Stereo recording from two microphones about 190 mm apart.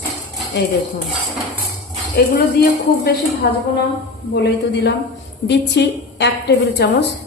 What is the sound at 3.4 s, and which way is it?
A woman's voice, 60° left (ahead or behind).